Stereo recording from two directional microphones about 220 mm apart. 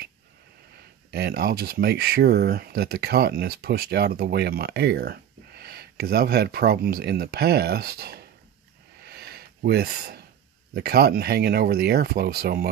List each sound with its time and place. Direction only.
1.1 s speech: 45° right (ahead or behind)
9.0 s a sound: 45° right (ahead or behind)
10.7 s speech: 45° right (ahead or behind)